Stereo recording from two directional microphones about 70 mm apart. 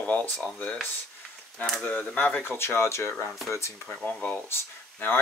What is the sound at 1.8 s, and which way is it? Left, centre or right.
Speech, left.